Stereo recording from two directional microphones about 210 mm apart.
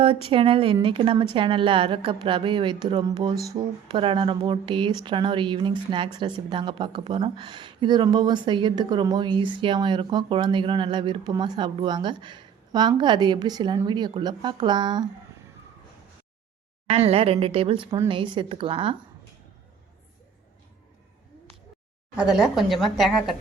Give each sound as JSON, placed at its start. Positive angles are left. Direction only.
{"t": 0.0, "sound": "speech", "side_deg": -25}
{"t": 16.9, "sound": "speech", "side_deg": -30}
{"t": 22.1, "sound": "a woman's voice", "side_deg": -5}